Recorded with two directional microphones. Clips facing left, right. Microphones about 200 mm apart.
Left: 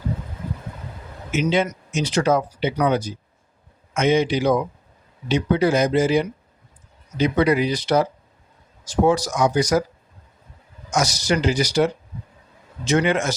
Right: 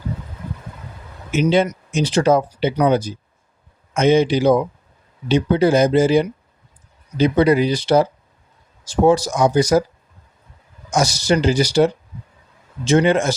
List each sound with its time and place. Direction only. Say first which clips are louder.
1.3 s speech: right 4 dB; 35° right (ahead or behind)
10.8 s speech: right 4 dB; 30° right (ahead or behind)